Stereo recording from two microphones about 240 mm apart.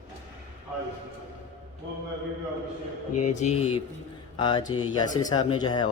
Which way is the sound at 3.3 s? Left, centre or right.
Left.